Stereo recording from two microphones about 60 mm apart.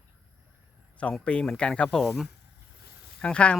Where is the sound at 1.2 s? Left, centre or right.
Centre.